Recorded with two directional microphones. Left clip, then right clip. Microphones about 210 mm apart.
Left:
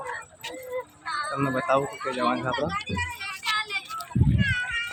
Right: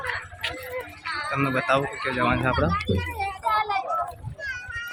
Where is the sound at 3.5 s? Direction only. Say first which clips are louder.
Right 6 dB; 35° left (ahead or behind).